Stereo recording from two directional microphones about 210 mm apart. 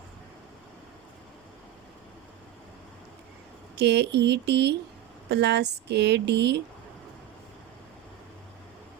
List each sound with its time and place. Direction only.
3.8 s speech: 55° right (ahead or behind)